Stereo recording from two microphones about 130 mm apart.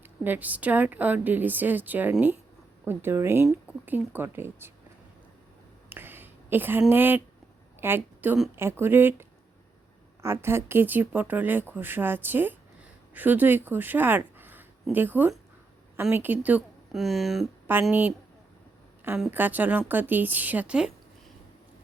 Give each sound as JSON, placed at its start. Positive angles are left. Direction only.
{"t": 0.0, "sound": "speech", "side_deg": -15}
{"t": 5.9, "sound": "a sound", "side_deg": -15}
{"t": 6.9, "sound": "a woman's voice", "side_deg": -15}
{"t": 10.2, "sound": "a woman's voice", "side_deg": -20}
{"t": 17.0, "sound": "speech", "side_deg": 0}
{"t": 17.7, "sound": "speech", "side_deg": -15}
{"t": 19.3, "sound": "speech", "side_deg": -15}